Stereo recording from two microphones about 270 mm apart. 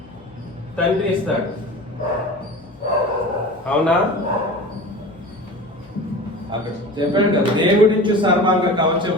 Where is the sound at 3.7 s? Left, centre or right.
Centre.